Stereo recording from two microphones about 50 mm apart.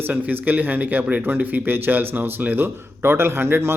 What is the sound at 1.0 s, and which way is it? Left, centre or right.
Speech, right.